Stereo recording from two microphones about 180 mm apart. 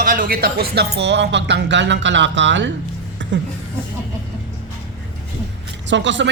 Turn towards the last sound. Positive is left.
turn(degrees=-85)